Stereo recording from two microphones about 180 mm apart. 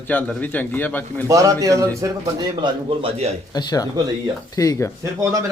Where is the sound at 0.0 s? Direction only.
10° left (ahead or behind).